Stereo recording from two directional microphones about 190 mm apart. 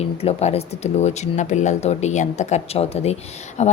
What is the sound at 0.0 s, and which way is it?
Speech, 30° left (ahead or behind).